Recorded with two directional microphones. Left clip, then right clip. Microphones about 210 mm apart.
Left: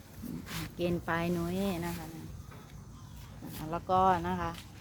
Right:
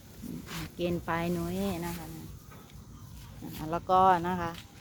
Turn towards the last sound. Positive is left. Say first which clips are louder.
# right 3 dB
turn(degrees=-30)  # may be behind; listen again after turning